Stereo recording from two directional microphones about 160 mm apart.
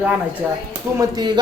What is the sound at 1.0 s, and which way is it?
Speech, 25° right (ahead or behind).